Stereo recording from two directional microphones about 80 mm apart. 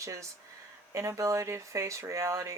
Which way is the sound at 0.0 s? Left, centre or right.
Right.